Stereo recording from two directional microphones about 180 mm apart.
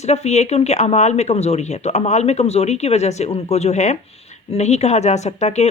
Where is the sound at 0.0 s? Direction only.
40° left (ahead or behind).